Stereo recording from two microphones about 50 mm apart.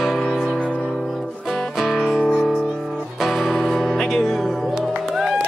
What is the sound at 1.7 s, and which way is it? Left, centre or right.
Music, centre.